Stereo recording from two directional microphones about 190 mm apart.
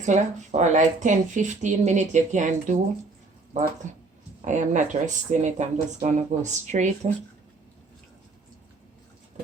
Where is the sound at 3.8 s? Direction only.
40° right (ahead or behind).